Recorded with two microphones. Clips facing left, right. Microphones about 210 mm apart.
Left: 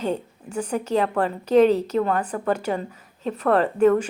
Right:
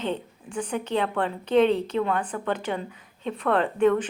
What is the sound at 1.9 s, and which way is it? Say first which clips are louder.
Speech: left 3 dB; 40° left (ahead or behind).